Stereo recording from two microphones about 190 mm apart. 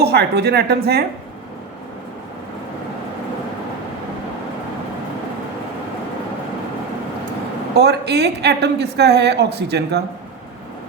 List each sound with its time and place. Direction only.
0.0 s speech: 60° right (ahead or behind)
7.8 s speech: 60° right (ahead or behind)